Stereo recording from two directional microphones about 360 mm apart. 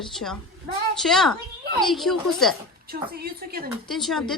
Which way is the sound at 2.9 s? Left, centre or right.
Right.